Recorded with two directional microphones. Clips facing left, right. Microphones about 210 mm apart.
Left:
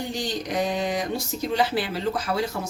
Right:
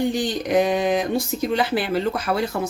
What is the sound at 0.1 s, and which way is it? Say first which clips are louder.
Speech: right 7 dB; 55° right (ahead or behind).